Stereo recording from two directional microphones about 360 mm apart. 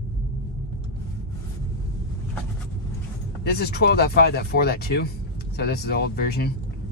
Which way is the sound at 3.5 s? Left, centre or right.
Left.